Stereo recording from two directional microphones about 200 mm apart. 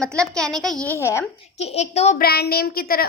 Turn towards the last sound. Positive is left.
turn(degrees=50)  # may be behind; listen again after turning